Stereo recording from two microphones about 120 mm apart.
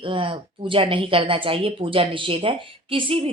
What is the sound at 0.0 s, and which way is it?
Speech, 45° right (ahead or behind).